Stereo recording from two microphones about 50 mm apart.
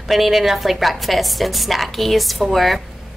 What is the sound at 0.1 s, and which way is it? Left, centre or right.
A woman's voice, centre.